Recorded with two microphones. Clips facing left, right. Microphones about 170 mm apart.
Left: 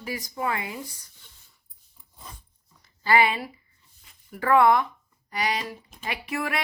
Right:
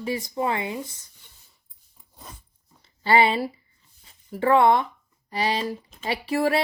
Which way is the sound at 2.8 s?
30° right (ahead or behind).